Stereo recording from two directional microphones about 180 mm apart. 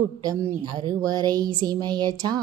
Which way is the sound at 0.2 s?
20° right (ahead or behind).